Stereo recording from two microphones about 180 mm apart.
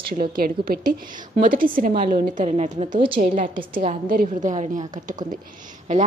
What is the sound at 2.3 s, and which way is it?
Speech, 40° right (ahead or behind).